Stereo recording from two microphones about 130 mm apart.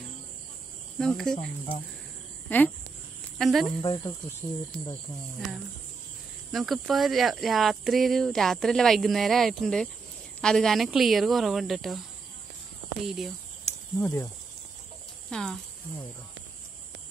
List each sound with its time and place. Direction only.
0.9 s speech: 5° left (ahead or behind)
2.5 s speech: 15° left (ahead or behind)
3.3 s speech: centre (ahead or behind)
3.8 s speech: 35° left (ahead or behind)
4.4 s speech: 45° left (ahead or behind)
6.5 s speech: centre (ahead or behind)
13.0 s speech: centre (ahead or behind)
13.9 s speech: 20° left (ahead or behind)
15.2 s speech: 5° left (ahead or behind)